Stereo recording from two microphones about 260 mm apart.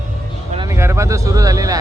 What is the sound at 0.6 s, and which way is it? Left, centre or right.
Speech, centre.